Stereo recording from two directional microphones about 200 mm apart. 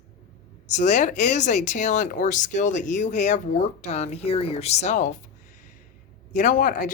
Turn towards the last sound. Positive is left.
turn(degrees=40)  # may be behind; listen again after turning